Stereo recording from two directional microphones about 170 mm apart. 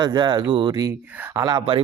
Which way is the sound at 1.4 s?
25° right (ahead or behind).